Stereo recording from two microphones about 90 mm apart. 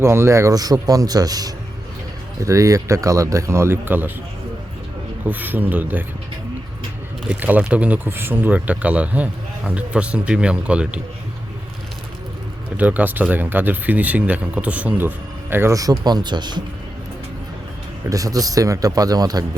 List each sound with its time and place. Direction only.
0.0 s a man's voice: 30° right (ahead or behind)
5.2 s speech: 20° right (ahead or behind)
7.3 s speech: 20° right (ahead or behind)
12.7 s speech: 20° right (ahead or behind)
15.7 s a man's voice: 45° right (ahead or behind)
18.1 s a man's voice: 40° right (ahead or behind)